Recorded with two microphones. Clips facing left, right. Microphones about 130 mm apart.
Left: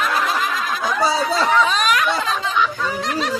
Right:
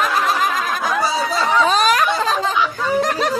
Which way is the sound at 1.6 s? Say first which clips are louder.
Right 3 dB; 35° right (ahead or behind).